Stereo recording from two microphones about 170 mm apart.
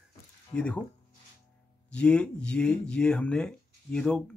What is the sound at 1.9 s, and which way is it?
Speech, 5° left (ahead or behind).